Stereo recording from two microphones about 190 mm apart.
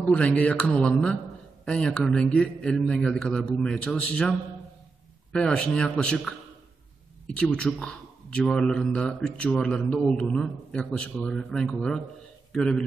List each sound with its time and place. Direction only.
0.1 s a man's voice: 5° left (ahead or behind)